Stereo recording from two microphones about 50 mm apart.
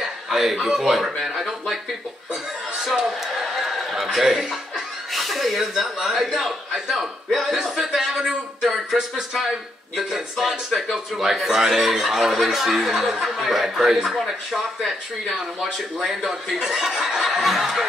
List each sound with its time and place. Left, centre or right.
0.3 s speech: centre
2.8 s chuckle: centre
6.9 s a man's voice: centre
8.2 s a sound: centre
8.9 s speech: centre